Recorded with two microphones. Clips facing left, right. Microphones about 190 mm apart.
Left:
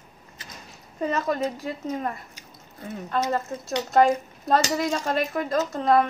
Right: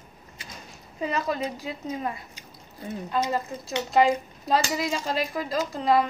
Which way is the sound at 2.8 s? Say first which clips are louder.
Even; 15° right (ahead or behind).